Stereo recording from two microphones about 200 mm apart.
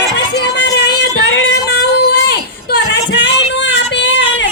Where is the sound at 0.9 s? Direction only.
60° left (ahead or behind).